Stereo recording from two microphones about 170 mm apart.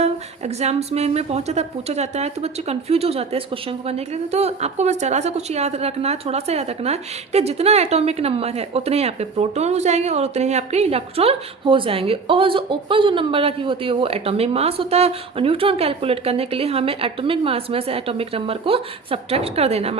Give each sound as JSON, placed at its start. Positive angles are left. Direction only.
{"t": 0.0, "sound": "speech", "side_deg": -40}